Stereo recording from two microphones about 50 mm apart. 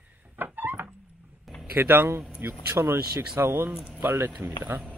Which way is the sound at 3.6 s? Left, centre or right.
Centre.